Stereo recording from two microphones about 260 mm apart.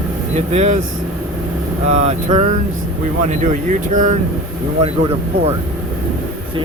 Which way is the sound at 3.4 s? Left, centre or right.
Right.